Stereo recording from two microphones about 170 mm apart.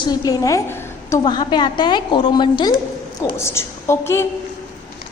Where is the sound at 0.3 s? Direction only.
20° left (ahead or behind).